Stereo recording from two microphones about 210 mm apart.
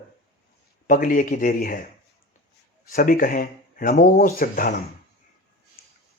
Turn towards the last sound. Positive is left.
turn(degrees=40)  # may be behind; listen again after turning